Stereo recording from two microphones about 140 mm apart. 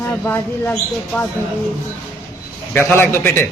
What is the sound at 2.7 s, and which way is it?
Speech, 15° left (ahead or behind).